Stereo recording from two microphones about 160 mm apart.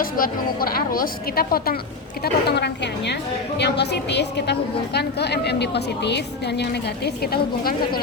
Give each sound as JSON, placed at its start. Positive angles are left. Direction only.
{"t": 0.0, "sound": "a woman's voice", "side_deg": 65}
{"t": 2.2, "sound": "a woman's voice", "side_deg": 90}